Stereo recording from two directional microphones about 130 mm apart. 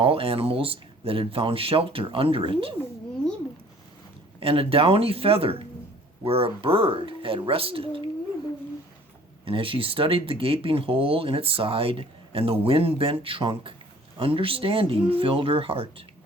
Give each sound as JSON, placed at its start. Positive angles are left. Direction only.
{"t": 0.0, "sound": "speech", "side_deg": -45}
{"t": 4.4, "sound": "speech", "side_deg": -45}
{"t": 9.4, "sound": "speech", "side_deg": -45}